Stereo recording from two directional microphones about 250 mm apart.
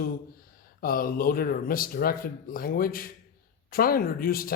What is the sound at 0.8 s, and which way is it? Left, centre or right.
Speech, left.